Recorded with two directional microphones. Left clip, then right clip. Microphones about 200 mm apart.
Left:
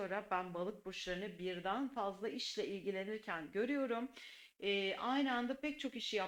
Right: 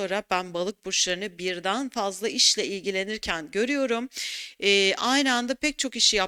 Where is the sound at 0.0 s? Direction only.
45° right (ahead or behind).